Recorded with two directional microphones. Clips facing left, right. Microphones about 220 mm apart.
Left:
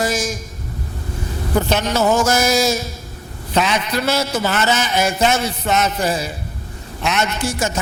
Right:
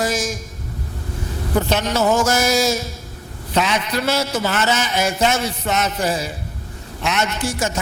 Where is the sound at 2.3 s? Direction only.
10° left (ahead or behind).